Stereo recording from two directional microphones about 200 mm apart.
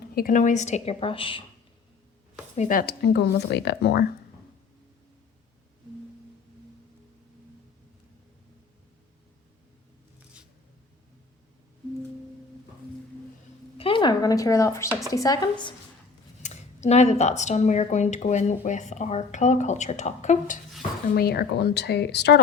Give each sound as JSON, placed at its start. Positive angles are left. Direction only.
{"t": 0.1, "sound": "speech", "side_deg": 45}
{"t": 2.6, "sound": "speech", "side_deg": 45}
{"t": 3.0, "sound": "speech", "side_deg": 55}
{"t": 13.7, "sound": "a sound", "side_deg": 25}
{"t": 15.1, "sound": "speech", "side_deg": 20}
{"t": 16.4, "sound": "speech", "side_deg": 35}
{"t": 21.2, "sound": "speech", "side_deg": 50}